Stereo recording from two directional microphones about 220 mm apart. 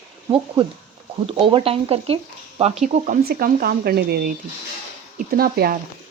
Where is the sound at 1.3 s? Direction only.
25° right (ahead or behind).